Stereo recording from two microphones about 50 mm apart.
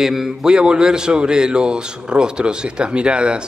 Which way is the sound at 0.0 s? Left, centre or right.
Centre.